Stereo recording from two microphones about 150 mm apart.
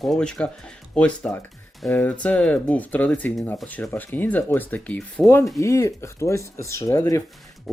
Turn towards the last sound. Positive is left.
turn(degrees=20)  # may be behind; listen again after turning